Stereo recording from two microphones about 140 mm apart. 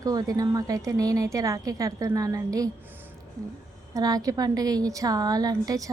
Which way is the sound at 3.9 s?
25° right (ahead or behind).